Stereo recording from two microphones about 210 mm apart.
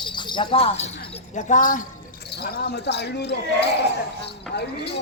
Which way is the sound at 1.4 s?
35° left (ahead or behind).